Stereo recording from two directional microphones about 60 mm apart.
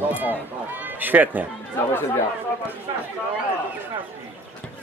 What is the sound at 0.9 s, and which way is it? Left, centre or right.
Chatter, right.